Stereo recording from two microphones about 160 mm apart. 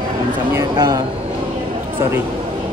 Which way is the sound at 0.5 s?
25° right (ahead or behind).